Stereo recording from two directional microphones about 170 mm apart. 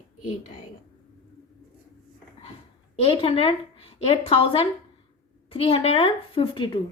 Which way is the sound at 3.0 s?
35° left (ahead or behind).